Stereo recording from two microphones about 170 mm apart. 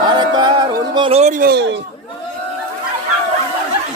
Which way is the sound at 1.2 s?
45° right (ahead or behind).